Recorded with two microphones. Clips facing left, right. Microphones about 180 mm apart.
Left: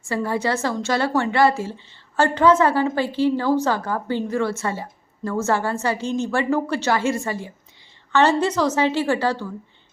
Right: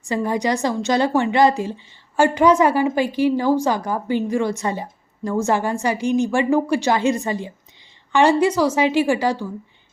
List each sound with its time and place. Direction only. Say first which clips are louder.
0.0 s a woman's voice: right 2 dB; 15° right (ahead or behind)